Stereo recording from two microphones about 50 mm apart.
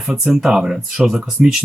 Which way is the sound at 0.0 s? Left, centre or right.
Centre.